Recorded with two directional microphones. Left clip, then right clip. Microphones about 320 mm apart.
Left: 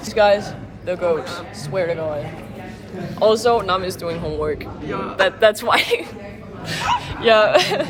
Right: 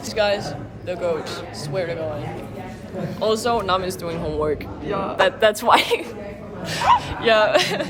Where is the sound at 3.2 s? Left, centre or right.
Centre.